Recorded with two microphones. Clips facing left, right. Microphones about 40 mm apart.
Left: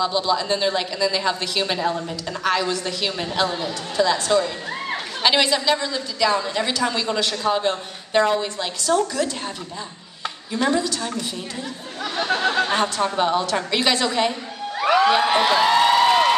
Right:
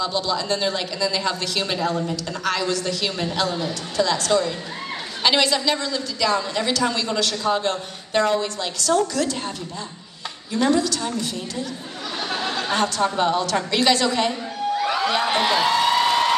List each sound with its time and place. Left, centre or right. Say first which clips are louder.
0.0 s a woman's voice: left 3 dB; centre
10.5 s a woman's voice: right 2 dB; centre
12.2 s speech: left 6 dB; left
12.7 s a woman's voice: even; centre
14.8 s crowd: left 8 dB; left
15.0 s a woman's voice: left 3 dB; centre
15.7 s a sound: left 3 dB; centre